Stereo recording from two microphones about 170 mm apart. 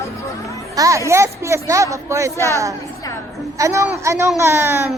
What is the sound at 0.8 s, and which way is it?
Speech, 20° right (ahead or behind).